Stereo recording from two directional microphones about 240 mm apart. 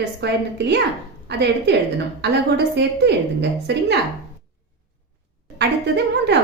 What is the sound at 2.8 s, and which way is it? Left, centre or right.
A woman's voice, right.